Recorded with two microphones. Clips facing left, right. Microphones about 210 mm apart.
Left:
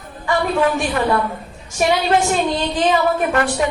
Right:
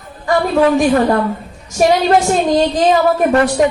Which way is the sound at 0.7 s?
40° right (ahead or behind).